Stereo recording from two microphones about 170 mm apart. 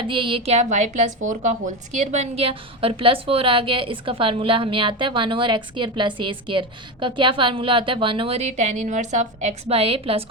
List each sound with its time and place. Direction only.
0.0 s speech: 30° right (ahead or behind)